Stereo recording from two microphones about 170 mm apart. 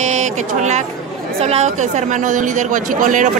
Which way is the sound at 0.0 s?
45° right (ahead or behind).